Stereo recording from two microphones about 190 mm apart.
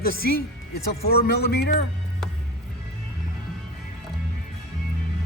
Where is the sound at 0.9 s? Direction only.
55° left (ahead or behind).